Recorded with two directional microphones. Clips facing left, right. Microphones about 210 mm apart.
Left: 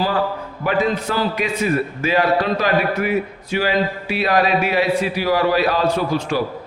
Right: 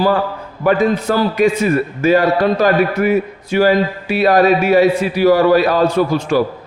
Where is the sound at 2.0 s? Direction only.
45° right (ahead or behind).